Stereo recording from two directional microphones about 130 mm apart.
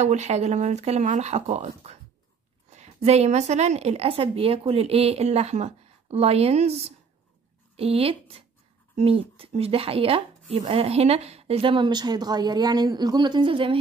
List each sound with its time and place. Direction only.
0.0 s speech: 60° right (ahead or behind); by 13.7 s 40° right (ahead or behind)